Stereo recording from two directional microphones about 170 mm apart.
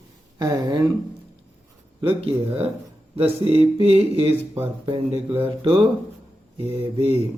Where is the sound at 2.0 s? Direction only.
35° right (ahead or behind).